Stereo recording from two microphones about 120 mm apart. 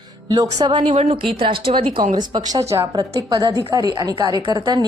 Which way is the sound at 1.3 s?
45° right (ahead or behind).